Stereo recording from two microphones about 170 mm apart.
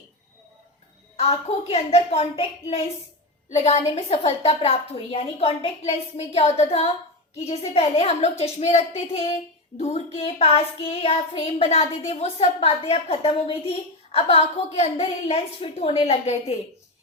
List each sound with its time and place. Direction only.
1.1 s a woman's voice: 40° left (ahead or behind)